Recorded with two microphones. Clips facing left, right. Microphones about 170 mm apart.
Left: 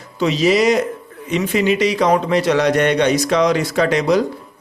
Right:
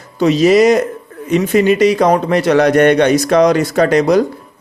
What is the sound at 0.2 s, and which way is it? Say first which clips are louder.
Speech: right 6 dB; 45° right (ahead or behind).